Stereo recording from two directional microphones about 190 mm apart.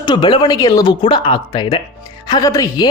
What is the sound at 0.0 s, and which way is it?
Speech, 25° left (ahead or behind).